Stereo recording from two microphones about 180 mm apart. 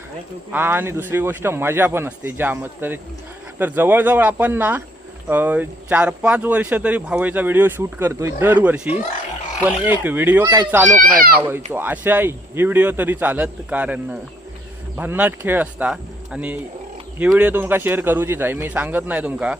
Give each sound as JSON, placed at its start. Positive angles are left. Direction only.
{"t": 0.5, "sound": "speech", "side_deg": -10}
{"t": 11.0, "sound": "a child's voice", "side_deg": -50}
{"t": 11.3, "sound": "speech", "side_deg": -10}